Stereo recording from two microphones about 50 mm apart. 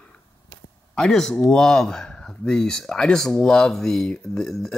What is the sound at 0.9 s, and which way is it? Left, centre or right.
Speech, centre.